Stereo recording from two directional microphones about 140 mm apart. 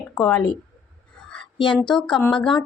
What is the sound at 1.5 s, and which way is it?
Speech, 35° left (ahead or behind).